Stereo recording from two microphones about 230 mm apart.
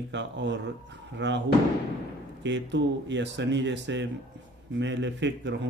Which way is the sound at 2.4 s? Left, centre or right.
Right.